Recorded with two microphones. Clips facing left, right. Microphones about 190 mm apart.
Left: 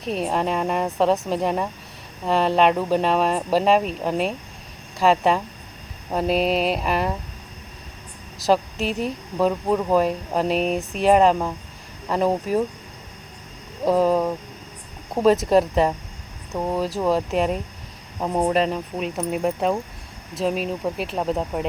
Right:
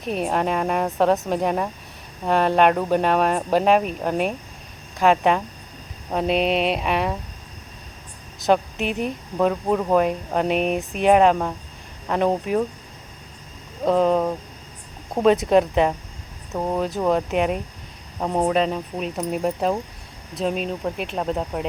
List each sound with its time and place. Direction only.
0.0 s speech: centre (ahead or behind)
8.4 s speech: centre (ahead or behind)
13.8 s speech: 5° left (ahead or behind)